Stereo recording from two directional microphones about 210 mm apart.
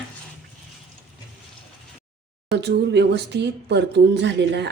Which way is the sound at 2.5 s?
50° right (ahead or behind).